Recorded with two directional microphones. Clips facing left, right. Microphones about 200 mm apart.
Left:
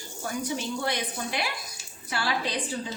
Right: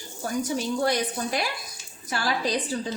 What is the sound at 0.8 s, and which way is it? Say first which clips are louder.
A woman's voice: right 5 dB; 40° right (ahead or behind).